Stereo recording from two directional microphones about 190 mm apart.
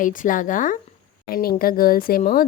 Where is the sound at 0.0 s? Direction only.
45° left (ahead or behind).